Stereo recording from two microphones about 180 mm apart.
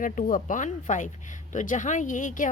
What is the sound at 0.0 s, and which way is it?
Speech, 50° left (ahead or behind).